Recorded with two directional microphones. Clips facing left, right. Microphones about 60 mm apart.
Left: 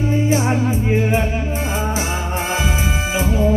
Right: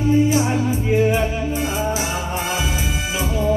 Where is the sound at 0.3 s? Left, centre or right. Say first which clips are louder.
Left 1 dB; left.